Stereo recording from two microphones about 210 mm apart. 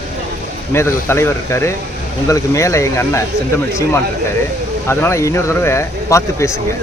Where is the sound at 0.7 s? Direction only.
10° left (ahead or behind).